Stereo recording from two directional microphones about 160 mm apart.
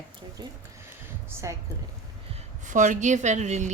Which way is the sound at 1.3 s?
15° right (ahead or behind).